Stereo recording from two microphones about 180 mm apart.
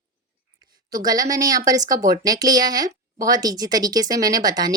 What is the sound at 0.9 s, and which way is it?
Speech, 20° right (ahead or behind).